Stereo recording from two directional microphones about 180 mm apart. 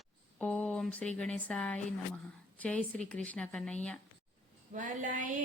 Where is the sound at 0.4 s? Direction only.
5° left (ahead or behind).